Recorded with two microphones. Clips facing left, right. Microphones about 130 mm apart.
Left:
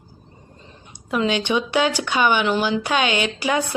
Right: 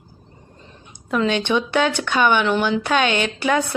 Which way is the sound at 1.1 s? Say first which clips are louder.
Right 1 dB; 10° left (ahead or behind).